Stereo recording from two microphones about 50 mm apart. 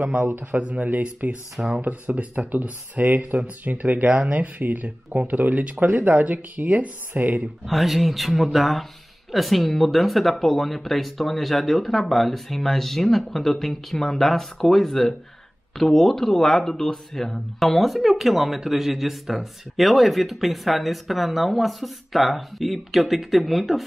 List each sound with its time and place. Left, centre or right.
0.0 s speech: centre
0.3 s speech: right
0.6 s speech: right
7.6 s speech: centre